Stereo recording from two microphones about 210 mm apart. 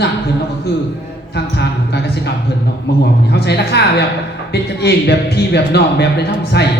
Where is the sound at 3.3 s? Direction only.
50° left (ahead or behind).